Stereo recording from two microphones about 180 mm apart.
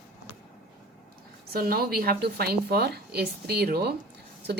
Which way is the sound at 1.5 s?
55° right (ahead or behind).